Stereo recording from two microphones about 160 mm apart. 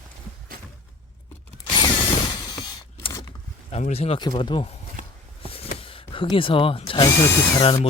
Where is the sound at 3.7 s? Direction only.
40° left (ahead or behind).